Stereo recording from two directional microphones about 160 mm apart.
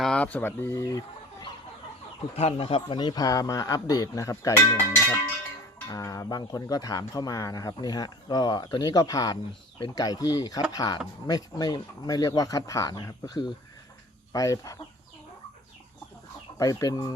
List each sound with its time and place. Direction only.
0.0 s speech: 5° left (ahead or behind)
2.3 s speech: 40° left (ahead or behind); by 4.6 s 20° left (ahead or behind)
5.9 s speech: 20° left (ahead or behind)
16.6 s speech: 20° left (ahead or behind)